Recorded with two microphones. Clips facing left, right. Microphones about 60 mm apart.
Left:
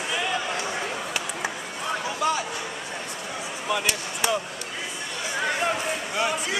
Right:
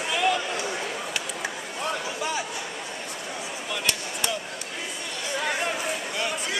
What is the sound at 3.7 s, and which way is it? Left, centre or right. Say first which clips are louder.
Speech: left 4 dB; centre.